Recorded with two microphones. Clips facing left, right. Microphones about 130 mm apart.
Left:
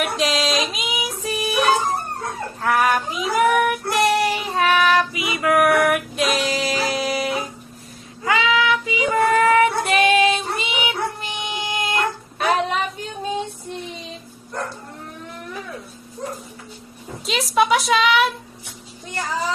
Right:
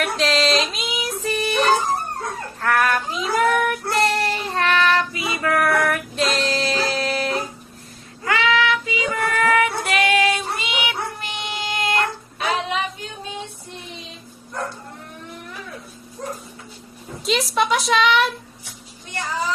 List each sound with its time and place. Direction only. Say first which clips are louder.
0.0 s female singing: right 1 dB; 10° left (ahead or behind)
2.6 s child singing: left 1 dB; 10° left (ahead or behind)
6.1 s music: left 1 dB; 5° left (ahead or behind)
8.2 s child singing: left 1 dB; 15° left (ahead or behind)
12.4 s a sound: left 3 dB; 45° left (ahead or behind)
17.2 s a sound: left 2 dB; centre (ahead or behind)